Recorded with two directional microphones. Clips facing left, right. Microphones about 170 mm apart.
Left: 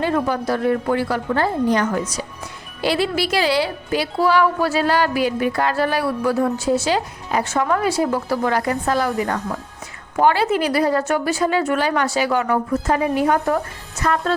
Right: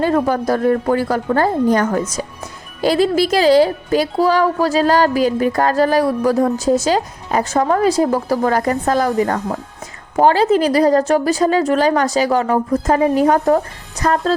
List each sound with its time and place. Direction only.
0.0 s a woman's voice: 45° right (ahead or behind)